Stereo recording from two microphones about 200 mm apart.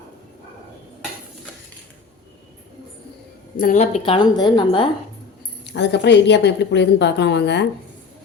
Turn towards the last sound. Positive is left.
turn(degrees=60)  # may be behind; listen again after turning